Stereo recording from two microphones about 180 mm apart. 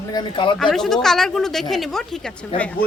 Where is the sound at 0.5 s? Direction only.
Centre (ahead or behind).